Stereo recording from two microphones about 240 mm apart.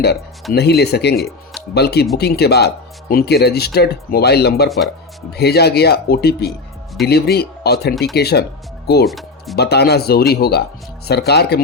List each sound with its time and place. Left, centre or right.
0.5 s speech: left
9.0 s music: centre
9.6 s speech: left